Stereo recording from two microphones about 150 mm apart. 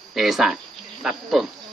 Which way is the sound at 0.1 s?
Centre (ahead or behind).